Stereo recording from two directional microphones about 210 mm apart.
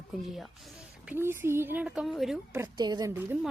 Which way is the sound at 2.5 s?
15° right (ahead or behind).